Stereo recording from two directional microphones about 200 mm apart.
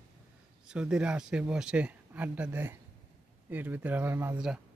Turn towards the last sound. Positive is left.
turn(degrees=-5)  # may be behind; listen again after turning